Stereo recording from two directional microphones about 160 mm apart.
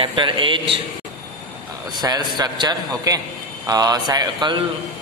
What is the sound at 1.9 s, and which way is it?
A man's voice, 25° right (ahead or behind).